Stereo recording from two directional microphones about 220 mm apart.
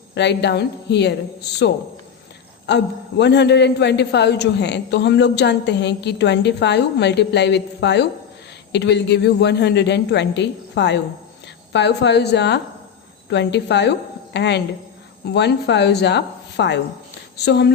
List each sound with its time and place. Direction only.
0.1 s a man's voice: 50° left (ahead or behind)